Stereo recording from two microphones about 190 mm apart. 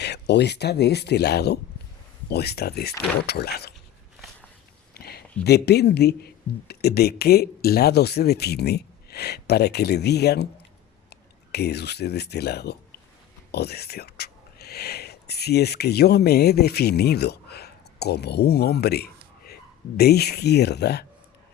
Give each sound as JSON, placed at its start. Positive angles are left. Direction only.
{"t": 0.0, "sound": "speech", "side_deg": 60}
{"t": 4.9, "sound": "a sound", "side_deg": 55}
{"t": 5.4, "sound": "speech", "side_deg": 60}